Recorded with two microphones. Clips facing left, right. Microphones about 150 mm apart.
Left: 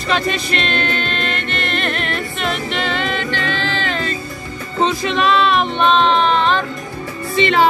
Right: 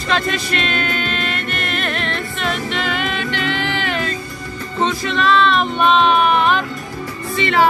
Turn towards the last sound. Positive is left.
turn(degrees=25)  # may be behind; listen again after turning